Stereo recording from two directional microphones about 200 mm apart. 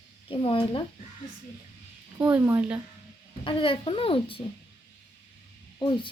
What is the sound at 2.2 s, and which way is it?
Speech, 10° right (ahead or behind).